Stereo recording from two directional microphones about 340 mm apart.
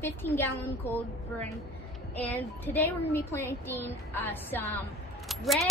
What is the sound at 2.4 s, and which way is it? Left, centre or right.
A woman's voice, centre.